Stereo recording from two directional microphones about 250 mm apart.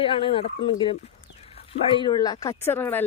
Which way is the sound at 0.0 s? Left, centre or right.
Left.